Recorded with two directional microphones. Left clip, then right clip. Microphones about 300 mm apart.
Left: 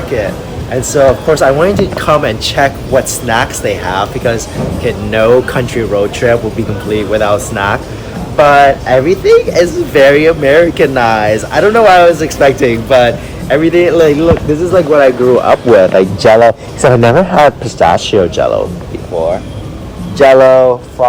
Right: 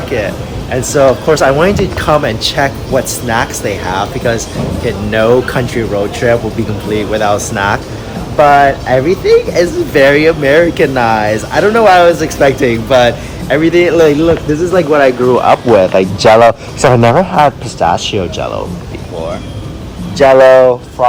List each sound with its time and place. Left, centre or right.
0.7 s speech: centre
16.2 s a man's voice: centre
17.0 s speech: centre
20.2 s a man's voice: centre